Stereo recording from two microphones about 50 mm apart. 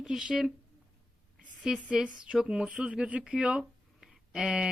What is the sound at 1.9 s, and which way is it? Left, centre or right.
Speech, right.